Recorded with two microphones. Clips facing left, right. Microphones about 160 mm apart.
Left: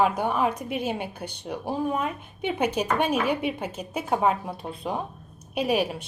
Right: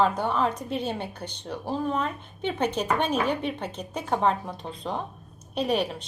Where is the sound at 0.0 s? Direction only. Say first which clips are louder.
Left 1 dB; 10° left (ahead or behind).